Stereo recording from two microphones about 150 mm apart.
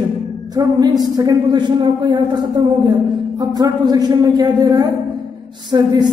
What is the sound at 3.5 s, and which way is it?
A woman's voice, 25° right (ahead or behind).